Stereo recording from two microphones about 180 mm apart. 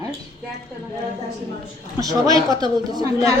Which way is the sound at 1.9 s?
20° right (ahead or behind).